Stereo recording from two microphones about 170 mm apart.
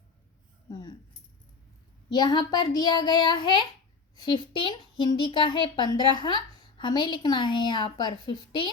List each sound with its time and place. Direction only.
0.7 s speech: 20° left (ahead or behind)
2.0 s speech: 25° left (ahead or behind)